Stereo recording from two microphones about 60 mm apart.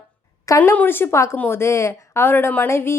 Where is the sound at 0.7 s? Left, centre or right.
Left.